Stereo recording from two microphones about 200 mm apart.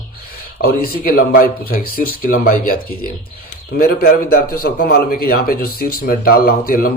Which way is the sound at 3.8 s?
45° left (ahead or behind).